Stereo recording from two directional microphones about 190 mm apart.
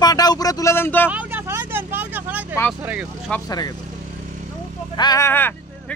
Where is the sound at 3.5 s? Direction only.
20° left (ahead or behind).